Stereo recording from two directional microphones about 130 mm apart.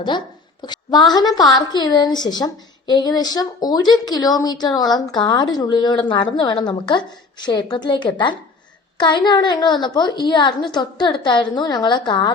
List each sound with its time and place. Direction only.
0.6 s a woman's voice: 30° left (ahead or behind)